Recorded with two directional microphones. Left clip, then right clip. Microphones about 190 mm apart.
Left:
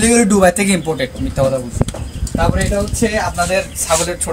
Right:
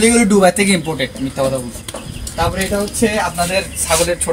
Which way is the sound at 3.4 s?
5° left (ahead or behind).